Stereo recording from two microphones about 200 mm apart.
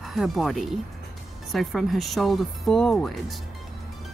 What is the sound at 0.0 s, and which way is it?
Speech, centre (ahead or behind).